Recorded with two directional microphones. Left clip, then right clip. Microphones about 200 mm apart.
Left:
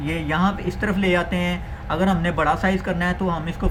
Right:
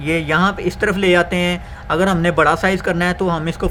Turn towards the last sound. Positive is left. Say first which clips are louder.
# right 6 dB
turn(degrees=-60)  # may be behind; listen again after turning